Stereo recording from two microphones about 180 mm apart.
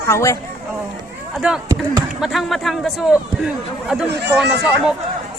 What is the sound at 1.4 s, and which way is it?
A man's voice, 5° right (ahead or behind).